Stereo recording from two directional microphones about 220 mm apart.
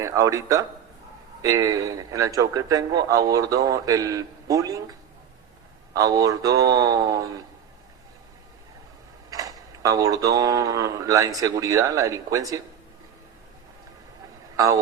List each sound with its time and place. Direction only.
0.0 s a man's voice: 15° right (ahead or behind)
9.3 s a man's voice: 15° right (ahead or behind)
14.5 s speech: 15° right (ahead or behind)